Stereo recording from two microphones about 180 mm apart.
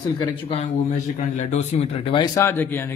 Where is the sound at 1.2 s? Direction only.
40° left (ahead or behind); by 2.4 s 25° left (ahead or behind).